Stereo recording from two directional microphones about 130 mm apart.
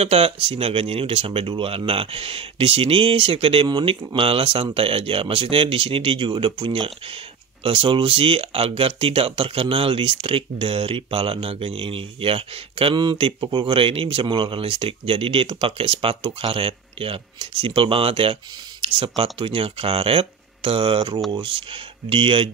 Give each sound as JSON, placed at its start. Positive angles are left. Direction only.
{"t": 0.0, "sound": "speech", "side_deg": -50}